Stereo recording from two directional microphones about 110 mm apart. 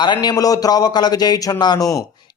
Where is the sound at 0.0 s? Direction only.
40° left (ahead or behind).